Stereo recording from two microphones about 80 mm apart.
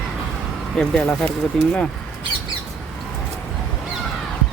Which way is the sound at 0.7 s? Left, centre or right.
Centre.